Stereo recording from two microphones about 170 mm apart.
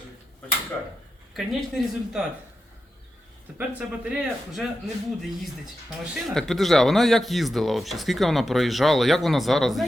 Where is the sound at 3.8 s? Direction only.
5° right (ahead or behind).